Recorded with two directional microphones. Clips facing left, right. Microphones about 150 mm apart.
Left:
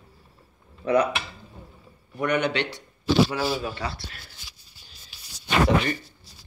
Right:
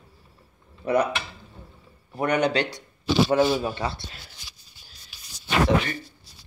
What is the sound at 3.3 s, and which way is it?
Speech, 25° right (ahead or behind).